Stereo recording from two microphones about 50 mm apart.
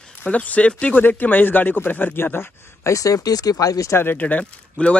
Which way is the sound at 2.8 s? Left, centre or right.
Left.